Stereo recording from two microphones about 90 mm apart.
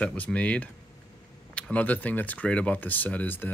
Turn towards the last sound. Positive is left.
turn(degrees=20)  # may be behind; listen again after turning